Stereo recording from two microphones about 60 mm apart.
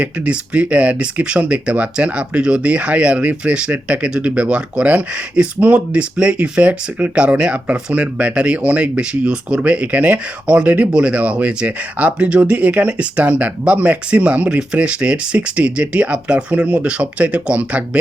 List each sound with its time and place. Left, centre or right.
0.0 s speech: right